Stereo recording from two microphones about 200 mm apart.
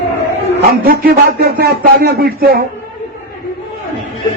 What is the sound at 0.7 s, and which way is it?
Speech, 50° right (ahead or behind).